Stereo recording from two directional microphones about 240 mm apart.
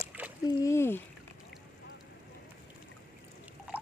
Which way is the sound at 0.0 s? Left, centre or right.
Centre.